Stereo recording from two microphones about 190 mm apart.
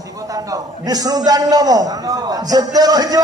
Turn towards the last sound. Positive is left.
turn(degrees=-20)  # may be behind; listen again after turning